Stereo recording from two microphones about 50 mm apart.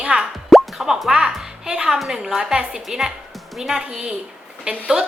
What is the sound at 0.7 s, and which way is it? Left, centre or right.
A woman's voice, centre.